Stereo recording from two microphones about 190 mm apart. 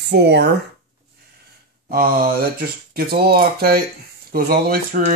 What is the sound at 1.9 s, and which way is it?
Speech, 50° right (ahead or behind).